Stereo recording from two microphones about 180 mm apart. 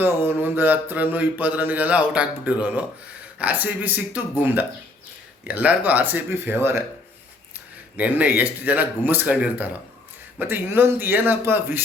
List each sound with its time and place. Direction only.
0.0 s mantra: 10° right (ahead or behind)
7.9 s mantra: 10° right (ahead or behind)